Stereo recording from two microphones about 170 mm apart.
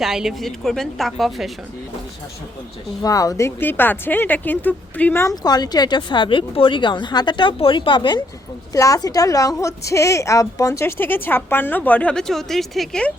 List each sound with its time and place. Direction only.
0.0 s a woman's voice: centre (ahead or behind)
3.0 s a woman's voice: 20° left (ahead or behind)
5.4 s a woman's voice: 25° left (ahead or behind); by 13.1 s 5° left (ahead or behind)